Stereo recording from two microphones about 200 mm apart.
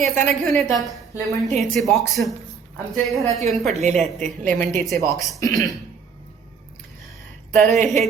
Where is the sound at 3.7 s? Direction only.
35° right (ahead or behind).